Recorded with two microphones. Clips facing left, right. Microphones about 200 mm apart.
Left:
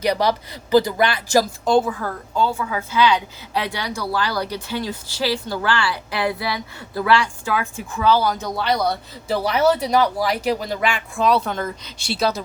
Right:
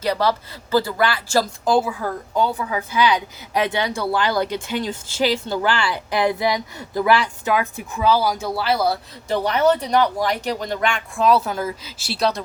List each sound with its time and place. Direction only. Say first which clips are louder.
0.0 s speech: left 1 dB; 15° left (ahead or behind)
1.6 s a woman's voice: left 1 dB; 5° right (ahead or behind)
9.3 s speech: even; 5° left (ahead or behind)